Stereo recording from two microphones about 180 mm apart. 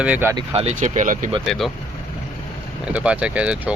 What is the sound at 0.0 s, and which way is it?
Speech, 10° right (ahead or behind).